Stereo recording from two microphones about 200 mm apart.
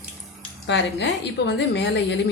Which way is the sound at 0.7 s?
60° left (ahead or behind).